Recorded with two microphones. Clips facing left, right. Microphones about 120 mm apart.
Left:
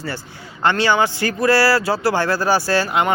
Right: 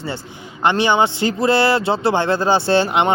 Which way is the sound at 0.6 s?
20° right (ahead or behind).